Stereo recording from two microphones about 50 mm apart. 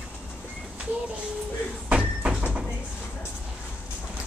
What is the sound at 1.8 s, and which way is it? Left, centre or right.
Door, right.